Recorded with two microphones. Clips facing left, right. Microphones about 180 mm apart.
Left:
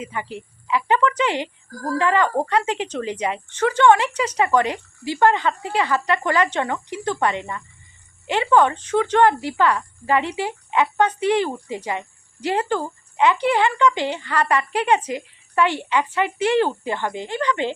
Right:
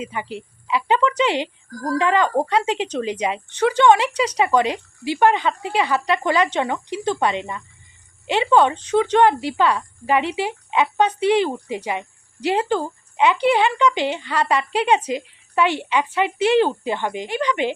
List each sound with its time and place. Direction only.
0.0 s a woman's voice: 20° right (ahead or behind)